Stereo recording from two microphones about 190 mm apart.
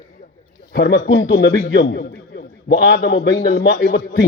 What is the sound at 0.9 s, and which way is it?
A man's voice, 65° left (ahead or behind).